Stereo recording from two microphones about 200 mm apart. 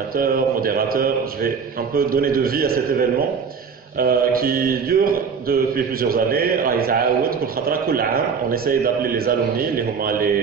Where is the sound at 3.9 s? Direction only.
45° right (ahead or behind).